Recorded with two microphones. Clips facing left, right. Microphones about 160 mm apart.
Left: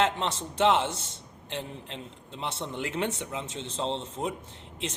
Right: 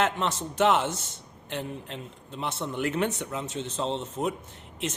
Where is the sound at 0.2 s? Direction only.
30° left (ahead or behind).